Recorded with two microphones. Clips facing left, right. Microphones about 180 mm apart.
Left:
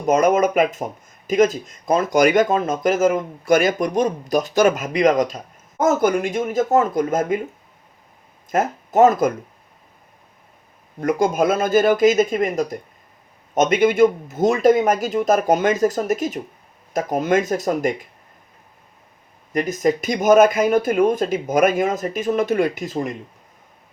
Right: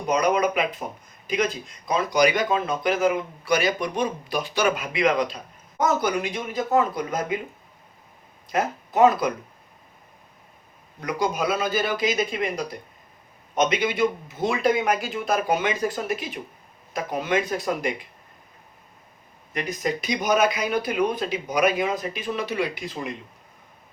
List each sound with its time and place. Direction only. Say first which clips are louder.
0.0 s speech: left 5 dB; 45° left (ahead or behind)
8.4 s speech: left 4 dB; 45° left (ahead or behind)
11.0 s speech: left 7 dB; 50° left (ahead or behind)
19.5 s speech: left 8 dB; 45° left (ahead or behind)